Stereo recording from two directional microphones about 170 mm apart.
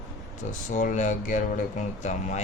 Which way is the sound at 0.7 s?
45° left (ahead or behind).